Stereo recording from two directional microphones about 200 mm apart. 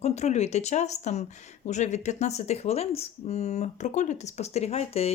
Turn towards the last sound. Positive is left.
turn(degrees=30)  # may be behind; listen again after turning